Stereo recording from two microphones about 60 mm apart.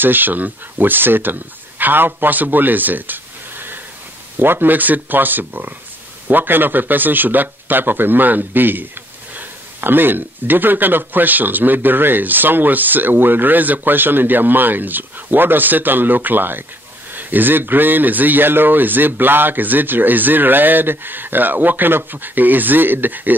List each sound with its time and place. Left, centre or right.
0.0 s speech: right